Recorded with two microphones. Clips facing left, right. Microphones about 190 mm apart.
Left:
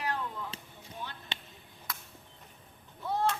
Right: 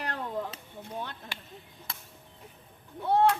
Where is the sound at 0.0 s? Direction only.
60° right (ahead or behind).